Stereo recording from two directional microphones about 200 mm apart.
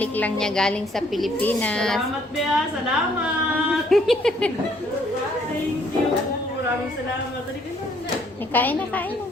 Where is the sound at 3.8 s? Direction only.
Centre (ahead or behind).